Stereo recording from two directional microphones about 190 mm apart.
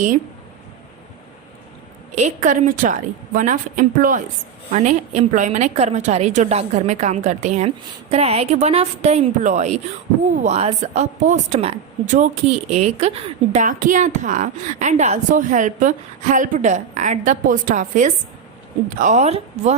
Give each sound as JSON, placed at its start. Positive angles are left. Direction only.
{"t": 2.1, "sound": "a woman's voice", "side_deg": -40}